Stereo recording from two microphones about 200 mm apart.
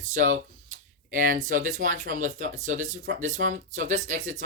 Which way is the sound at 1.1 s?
40° right (ahead or behind).